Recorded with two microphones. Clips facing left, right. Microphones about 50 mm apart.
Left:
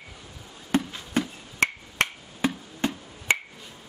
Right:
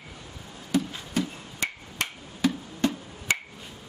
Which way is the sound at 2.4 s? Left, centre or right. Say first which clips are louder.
Right 2 dB; left.